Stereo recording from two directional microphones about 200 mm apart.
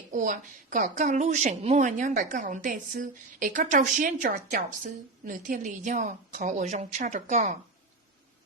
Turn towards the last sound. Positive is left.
turn(degrees=-35)  # may be behind; listen again after turning